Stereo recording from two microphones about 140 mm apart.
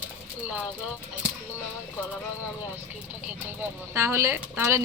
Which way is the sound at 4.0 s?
20° right (ahead or behind).